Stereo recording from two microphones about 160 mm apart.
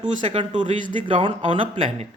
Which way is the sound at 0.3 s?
30° right (ahead or behind).